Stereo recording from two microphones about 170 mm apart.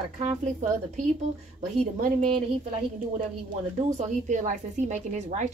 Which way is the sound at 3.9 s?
45° right (ahead or behind).